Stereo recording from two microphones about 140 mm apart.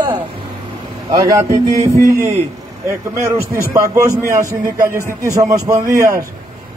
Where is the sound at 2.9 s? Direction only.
20° right (ahead or behind).